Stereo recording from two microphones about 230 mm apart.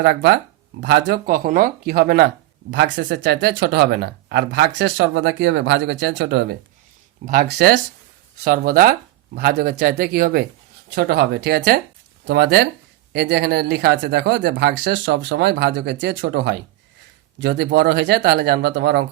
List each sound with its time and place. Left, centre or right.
0.0 s speech: right